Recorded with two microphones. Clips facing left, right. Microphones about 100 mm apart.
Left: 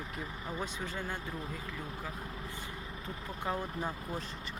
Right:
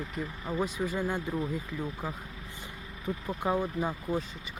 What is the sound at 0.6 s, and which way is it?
Speech, 10° right (ahead or behind).